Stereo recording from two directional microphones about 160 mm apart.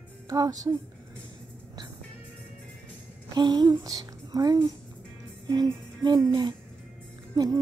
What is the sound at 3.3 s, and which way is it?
A child's voice, 25° right (ahead or behind).